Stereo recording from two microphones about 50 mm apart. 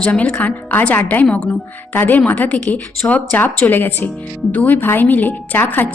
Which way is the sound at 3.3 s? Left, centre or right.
Left.